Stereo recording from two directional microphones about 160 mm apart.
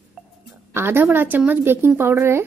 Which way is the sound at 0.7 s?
15° right (ahead or behind).